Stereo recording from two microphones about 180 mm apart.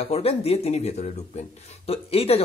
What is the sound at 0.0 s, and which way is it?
Speech, 35° left (ahead or behind).